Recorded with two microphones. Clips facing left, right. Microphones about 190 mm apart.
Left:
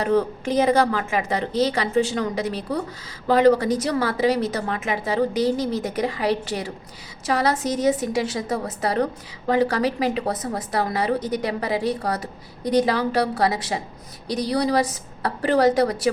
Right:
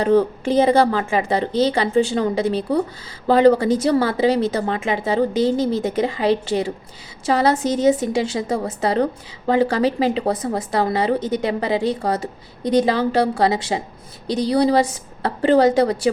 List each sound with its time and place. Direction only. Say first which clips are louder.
0.0 s a woman's voice: right 4 dB; 30° right (ahead or behind)